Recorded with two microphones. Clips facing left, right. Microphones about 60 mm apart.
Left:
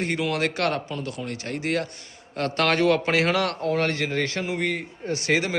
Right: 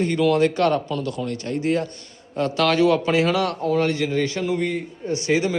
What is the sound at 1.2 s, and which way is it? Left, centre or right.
A man's voice, left.